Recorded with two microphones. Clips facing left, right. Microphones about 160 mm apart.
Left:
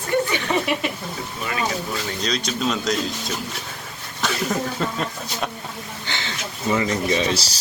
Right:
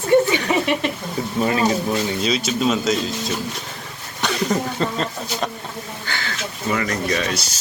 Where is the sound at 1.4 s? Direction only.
30° right (ahead or behind).